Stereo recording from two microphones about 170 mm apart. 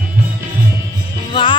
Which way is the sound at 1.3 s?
30° left (ahead or behind).